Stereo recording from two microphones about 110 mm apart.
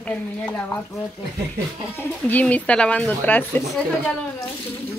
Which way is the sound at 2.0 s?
15° left (ahead or behind).